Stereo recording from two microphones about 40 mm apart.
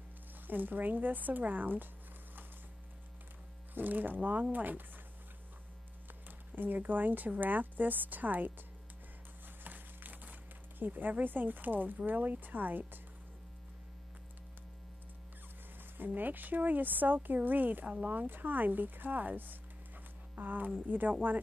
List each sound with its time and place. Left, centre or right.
0.5 s speech: right
3.7 s speech: right
6.2 s speech: right
9.6 s a sound: right
10.8 s speech: right
16.2 s speech: right